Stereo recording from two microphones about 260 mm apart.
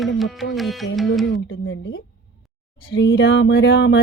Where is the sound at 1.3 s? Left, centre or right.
Left.